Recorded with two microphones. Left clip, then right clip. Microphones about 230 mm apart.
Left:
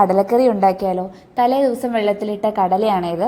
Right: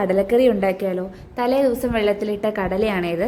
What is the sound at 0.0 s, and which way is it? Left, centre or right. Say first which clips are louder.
A woman's voice: left 3 dB; centre.